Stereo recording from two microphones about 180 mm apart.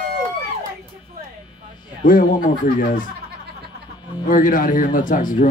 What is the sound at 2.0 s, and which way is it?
Speech, 50° left (ahead or behind).